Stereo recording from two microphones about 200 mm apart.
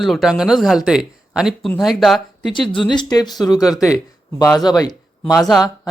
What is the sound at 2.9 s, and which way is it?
A man's voice, 20° left (ahead or behind).